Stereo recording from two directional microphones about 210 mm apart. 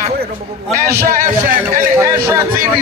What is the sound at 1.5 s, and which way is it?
Speech, 10° right (ahead or behind).